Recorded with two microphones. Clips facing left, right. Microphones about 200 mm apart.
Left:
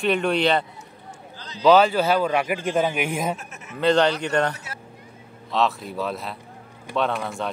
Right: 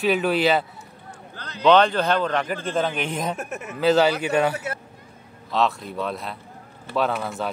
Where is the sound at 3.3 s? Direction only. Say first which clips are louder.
Right 10 dB; 55° right (ahead or behind).